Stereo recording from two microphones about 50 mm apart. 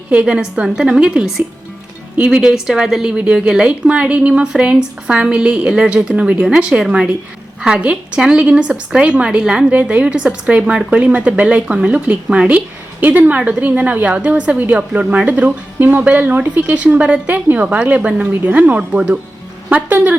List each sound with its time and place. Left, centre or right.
0.1 s a woman's voice: right
2.1 s speech: right
2.4 s a woman's voice: centre
3.1 s a woman's voice: right
13.0 s speech: right
16.6 s speech: right